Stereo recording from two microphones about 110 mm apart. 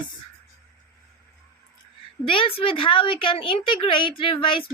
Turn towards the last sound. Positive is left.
turn(degrees=50)  # may be behind; listen again after turning